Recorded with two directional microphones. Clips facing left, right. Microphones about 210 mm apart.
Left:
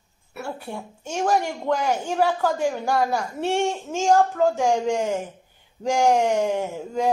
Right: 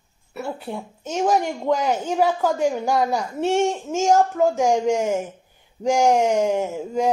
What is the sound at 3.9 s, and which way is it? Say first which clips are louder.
Speech: right 1 dB; 5° right (ahead or behind).